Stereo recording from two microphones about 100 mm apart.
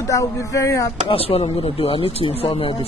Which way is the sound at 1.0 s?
70° left (ahead or behind).